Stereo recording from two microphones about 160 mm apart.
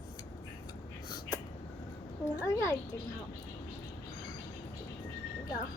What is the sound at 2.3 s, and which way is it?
Speech, 20° left (ahead or behind).